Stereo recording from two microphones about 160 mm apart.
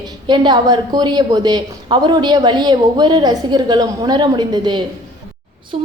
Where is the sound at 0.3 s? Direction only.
25° right (ahead or behind).